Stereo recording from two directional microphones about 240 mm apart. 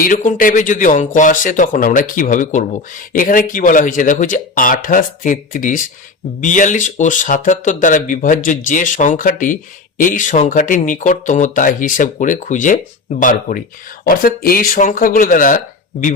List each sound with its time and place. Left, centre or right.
0.0 s speech: left